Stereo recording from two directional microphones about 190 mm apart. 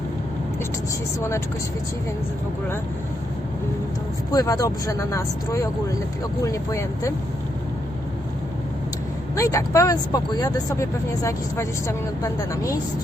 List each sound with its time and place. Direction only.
4.3 s speech: 20° left (ahead or behind)
9.3 s speech: 15° left (ahead or behind)